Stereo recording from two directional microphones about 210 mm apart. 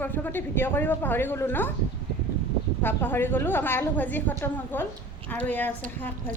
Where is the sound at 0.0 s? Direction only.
10° left (ahead or behind).